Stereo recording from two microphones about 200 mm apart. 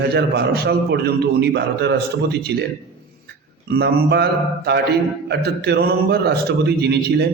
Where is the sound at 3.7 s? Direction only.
55° right (ahead or behind).